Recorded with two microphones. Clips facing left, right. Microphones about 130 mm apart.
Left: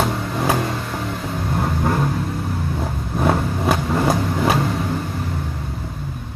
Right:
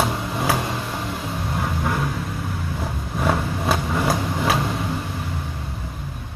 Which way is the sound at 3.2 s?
20° left (ahead or behind).